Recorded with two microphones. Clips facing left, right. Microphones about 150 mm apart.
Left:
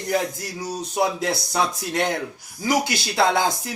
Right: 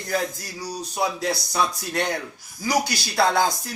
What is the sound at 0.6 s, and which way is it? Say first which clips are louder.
Speech: left 3 dB; 20° left (ahead or behind).